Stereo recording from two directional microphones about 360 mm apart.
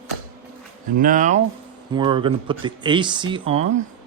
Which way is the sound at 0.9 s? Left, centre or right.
Right.